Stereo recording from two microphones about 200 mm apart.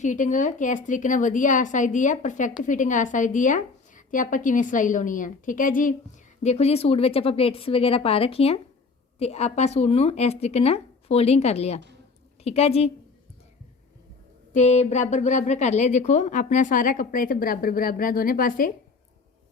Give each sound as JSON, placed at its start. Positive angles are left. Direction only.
{"t": 0.0, "sound": "a woman's voice", "side_deg": 40}
{"t": 14.5, "sound": "speech", "side_deg": 35}